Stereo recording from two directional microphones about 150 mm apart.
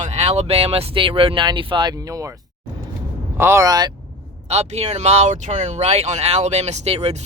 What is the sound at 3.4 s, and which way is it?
Speech, 20° right (ahead or behind).